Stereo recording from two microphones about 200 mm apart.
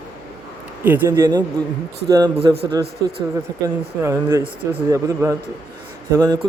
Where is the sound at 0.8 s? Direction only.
10° right (ahead or behind).